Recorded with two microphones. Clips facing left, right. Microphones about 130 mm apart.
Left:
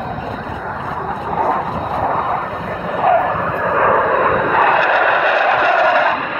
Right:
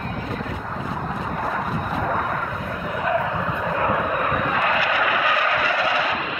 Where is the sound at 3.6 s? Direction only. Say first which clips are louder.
Left 9 dB; 65° left (ahead or behind).